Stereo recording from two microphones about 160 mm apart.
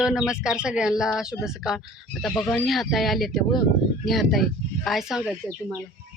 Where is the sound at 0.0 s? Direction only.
5° right (ahead or behind).